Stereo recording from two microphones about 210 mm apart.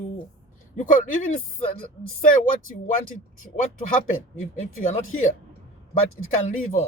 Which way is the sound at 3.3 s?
40° left (ahead or behind).